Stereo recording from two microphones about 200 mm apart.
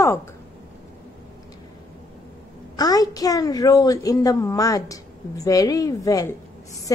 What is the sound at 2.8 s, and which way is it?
A woman's voice, 20° left (ahead or behind).